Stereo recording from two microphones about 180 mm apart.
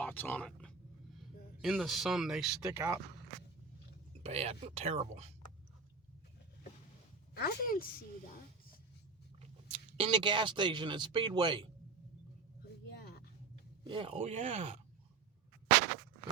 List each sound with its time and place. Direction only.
0.0 s speech: 10° left (ahead or behind)
2.6 s speech: 20° right (ahead or behind)
4.2 s speech: 35° right (ahead or behind)
7.3 s a woman's voice: 55° left (ahead or behind)
9.4 s speech: 35° right (ahead or behind)
12.6 s vehicle: 65° left (ahead or behind)
13.8 s speech: 30° right (ahead or behind)